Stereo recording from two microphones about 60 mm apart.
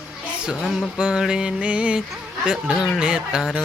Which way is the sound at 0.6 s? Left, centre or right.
Centre.